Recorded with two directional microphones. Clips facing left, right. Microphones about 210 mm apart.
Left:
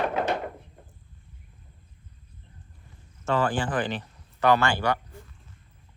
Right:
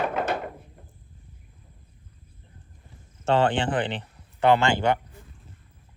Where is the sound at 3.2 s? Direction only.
30° right (ahead or behind).